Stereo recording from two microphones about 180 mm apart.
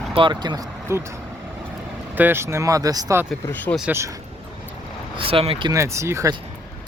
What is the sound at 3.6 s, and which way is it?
Speech, centre (ahead or behind).